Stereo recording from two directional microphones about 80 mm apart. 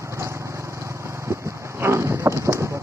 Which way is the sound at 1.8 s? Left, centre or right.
Right.